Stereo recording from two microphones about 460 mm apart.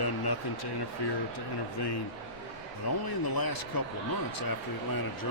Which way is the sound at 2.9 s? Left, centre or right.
Left.